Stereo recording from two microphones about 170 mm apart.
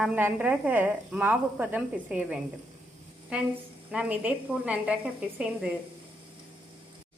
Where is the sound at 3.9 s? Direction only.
5° right (ahead or behind).